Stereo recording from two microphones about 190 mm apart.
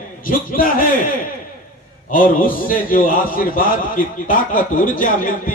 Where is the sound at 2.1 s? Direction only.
45° left (ahead or behind).